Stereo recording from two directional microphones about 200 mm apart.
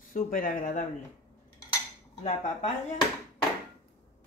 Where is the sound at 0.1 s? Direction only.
45° left (ahead or behind).